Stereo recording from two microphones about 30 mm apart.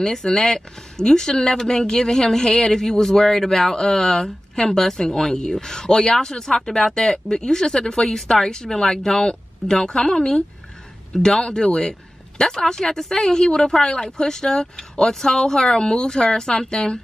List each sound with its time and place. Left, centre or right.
0.0 s speech: centre
3.7 s speech: left